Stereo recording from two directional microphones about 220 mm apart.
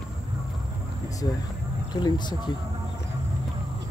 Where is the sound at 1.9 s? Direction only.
20° left (ahead or behind).